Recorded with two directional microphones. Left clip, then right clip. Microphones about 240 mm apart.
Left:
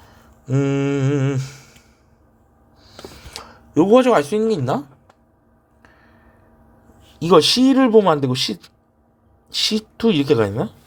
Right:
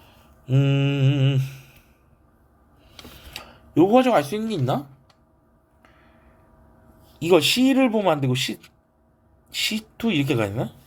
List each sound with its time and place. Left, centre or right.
0.5 s mantra: left
3.2 s speech: centre
7.0 s speech: left